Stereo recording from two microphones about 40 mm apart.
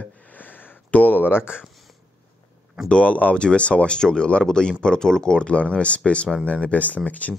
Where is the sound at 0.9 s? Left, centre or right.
Left.